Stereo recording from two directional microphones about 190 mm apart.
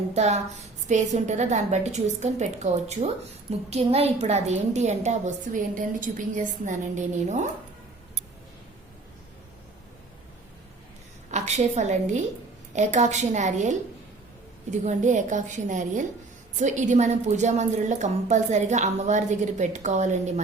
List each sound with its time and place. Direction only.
0.1 s a woman's voice: 35° right (ahead or behind)
11.3 s a woman's voice: 35° right (ahead or behind)